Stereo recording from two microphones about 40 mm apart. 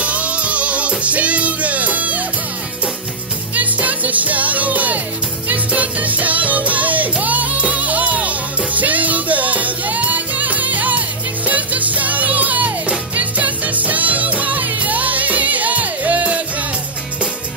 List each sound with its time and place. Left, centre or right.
0.0 s music: right
3.5 s music: right